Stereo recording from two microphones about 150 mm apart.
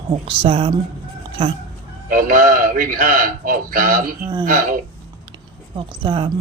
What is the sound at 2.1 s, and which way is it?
Speech, 65° right (ahead or behind).